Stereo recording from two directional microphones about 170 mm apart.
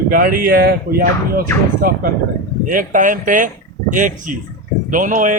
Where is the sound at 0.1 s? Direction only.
55° right (ahead or behind).